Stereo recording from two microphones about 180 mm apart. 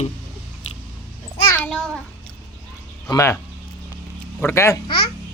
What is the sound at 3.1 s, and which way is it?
Speech, 15° left (ahead or behind).